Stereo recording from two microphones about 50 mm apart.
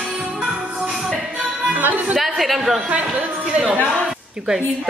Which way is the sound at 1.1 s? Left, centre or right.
Right.